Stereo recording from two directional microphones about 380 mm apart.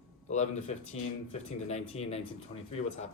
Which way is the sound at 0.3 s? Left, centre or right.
Centre.